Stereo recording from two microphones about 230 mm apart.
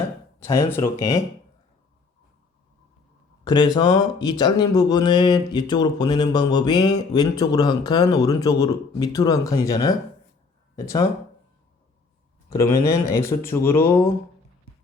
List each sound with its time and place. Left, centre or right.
0.3 s speech: centre
3.4 s speech: centre
12.5 s speech: centre